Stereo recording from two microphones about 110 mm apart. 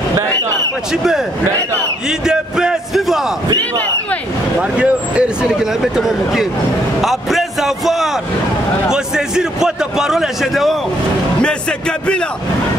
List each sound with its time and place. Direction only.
0.9 s a man's voice: 5° right (ahead or behind)
4.6 s speech: 10° right (ahead or behind)
7.0 s a sound: centre (ahead or behind)
8.9 s a man's voice: 5° right (ahead or behind)